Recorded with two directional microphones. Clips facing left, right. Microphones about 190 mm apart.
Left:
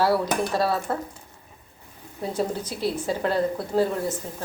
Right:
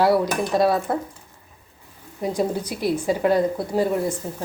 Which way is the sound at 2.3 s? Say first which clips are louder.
Right 2 dB; 10° right (ahead or behind).